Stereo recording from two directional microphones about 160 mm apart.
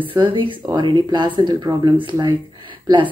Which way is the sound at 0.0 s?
30° right (ahead or behind).